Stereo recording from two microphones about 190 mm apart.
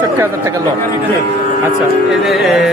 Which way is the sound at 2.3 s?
Centre (ahead or behind).